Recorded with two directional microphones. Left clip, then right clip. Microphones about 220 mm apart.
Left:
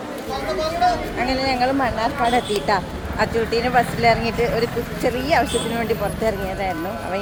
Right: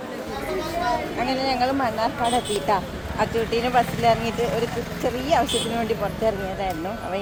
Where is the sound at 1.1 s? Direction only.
10° right (ahead or behind).